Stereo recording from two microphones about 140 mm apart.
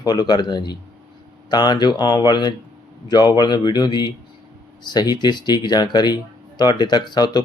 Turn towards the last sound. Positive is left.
turn(degrees=30)  # may be behind; listen again after turning